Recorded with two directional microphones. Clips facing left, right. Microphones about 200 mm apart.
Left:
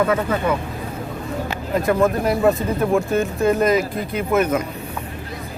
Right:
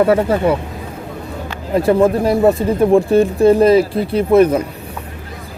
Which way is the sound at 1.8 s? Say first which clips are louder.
Right 6 dB; 30° right (ahead or behind).